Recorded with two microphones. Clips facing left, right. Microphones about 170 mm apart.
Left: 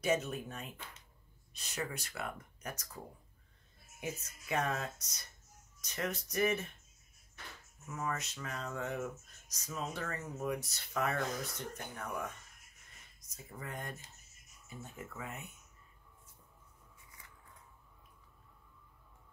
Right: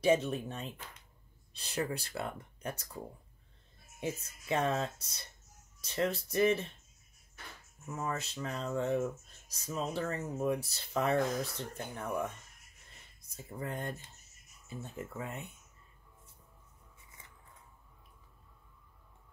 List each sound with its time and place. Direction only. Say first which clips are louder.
0.0 s speech: right 5 dB; 30° right (ahead or behind)
4.0 s speech: right 4 dB; 30° right (ahead or behind)
7.9 s speech: right 2 dB; 30° right (ahead or behind)